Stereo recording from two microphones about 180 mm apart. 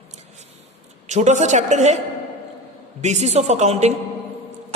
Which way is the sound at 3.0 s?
40° right (ahead or behind).